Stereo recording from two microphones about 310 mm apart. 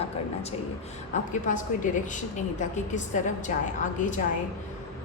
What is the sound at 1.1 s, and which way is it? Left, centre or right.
A woman's voice, left.